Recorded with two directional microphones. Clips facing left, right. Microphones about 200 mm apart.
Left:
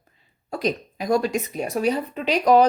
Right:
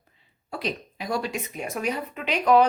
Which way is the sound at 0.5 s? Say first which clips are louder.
Left 6 dB; 45° left (ahead or behind).